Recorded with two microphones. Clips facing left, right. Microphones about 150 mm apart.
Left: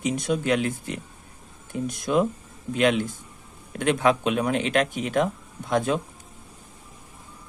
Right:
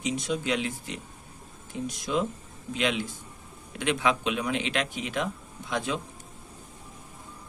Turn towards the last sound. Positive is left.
turn(degrees=50)  # may be behind; listen again after turning